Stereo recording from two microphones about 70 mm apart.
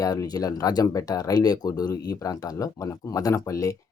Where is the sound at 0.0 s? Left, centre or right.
Left.